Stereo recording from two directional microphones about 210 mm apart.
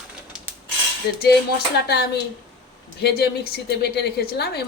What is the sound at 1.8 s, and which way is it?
A woman's voice, 50° left (ahead or behind).